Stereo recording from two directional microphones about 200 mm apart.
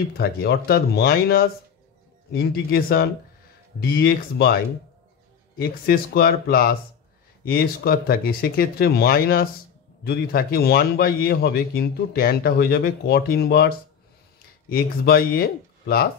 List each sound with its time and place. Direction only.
0.2 s a man's voice: 55° left (ahead or behind)
5.6 s a man's voice: 50° left (ahead or behind)